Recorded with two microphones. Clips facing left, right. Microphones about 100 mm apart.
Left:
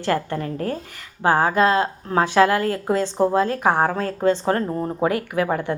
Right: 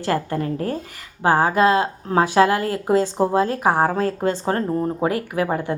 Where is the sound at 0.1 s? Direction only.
30° right (ahead or behind).